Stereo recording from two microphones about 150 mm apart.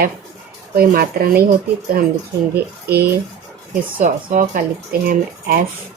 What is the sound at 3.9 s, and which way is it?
Speech, 60° right (ahead or behind).